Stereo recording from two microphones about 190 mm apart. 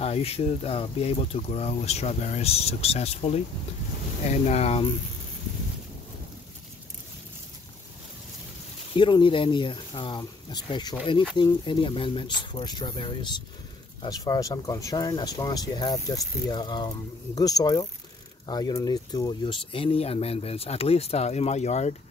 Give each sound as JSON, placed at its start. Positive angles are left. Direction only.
{"t": 0.0, "sound": "speech", "side_deg": 30}
{"t": 4.5, "sound": "speech", "side_deg": 35}
{"t": 8.9, "sound": "speech", "side_deg": 25}